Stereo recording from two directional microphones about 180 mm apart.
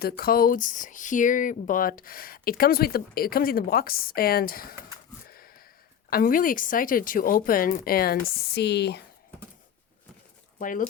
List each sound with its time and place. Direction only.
0.0 s speech: 55° left (ahead or behind)
5.3 s a sound: 55° left (ahead or behind)
6.1 s speech: 50° left (ahead or behind); by 9.0 s 70° left (ahead or behind)
10.6 s speech: 45° left (ahead or behind)